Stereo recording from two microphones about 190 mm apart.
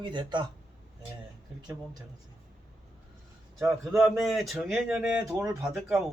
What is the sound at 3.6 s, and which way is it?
Speech, 15° right (ahead or behind).